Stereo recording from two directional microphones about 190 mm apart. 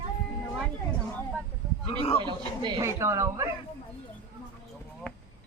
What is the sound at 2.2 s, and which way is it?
A man's voice, 25° right (ahead or behind).